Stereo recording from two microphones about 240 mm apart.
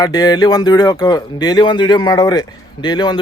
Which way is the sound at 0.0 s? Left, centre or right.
Centre.